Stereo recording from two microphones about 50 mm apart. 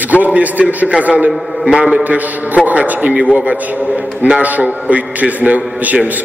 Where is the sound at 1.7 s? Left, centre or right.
Right.